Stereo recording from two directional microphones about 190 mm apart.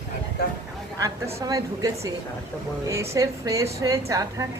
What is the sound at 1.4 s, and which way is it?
A woman's voice, 20° right (ahead or behind).